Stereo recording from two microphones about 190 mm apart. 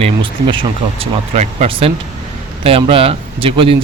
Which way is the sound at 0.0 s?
25° right (ahead or behind).